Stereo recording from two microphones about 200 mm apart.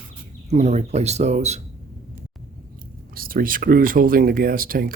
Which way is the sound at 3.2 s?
45° right (ahead or behind).